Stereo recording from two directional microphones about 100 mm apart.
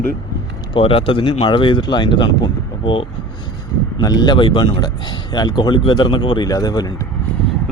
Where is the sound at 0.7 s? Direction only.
65° left (ahead or behind); by 2.4 s 50° left (ahead or behind).